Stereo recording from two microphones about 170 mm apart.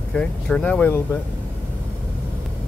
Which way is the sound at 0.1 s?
5° left (ahead or behind).